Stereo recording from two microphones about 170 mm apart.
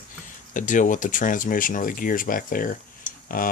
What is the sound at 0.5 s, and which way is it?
Speech, 50° left (ahead or behind).